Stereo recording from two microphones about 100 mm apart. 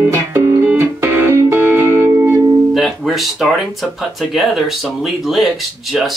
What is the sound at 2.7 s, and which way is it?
Speech, centre (ahead or behind).